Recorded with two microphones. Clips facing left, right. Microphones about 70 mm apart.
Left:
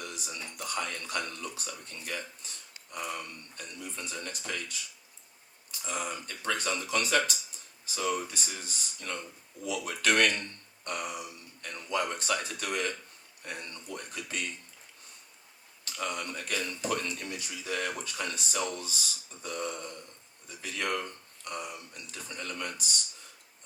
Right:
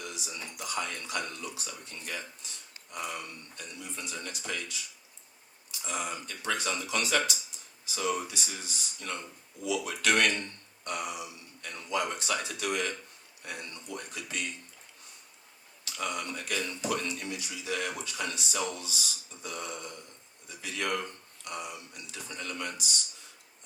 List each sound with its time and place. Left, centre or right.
0.0 s a sound: left
0.5 s speech: left
5.8 s speech: left
16.0 s speech: left